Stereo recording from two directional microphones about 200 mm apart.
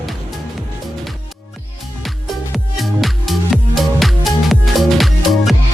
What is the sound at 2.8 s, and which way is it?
Music, centre (ahead or behind).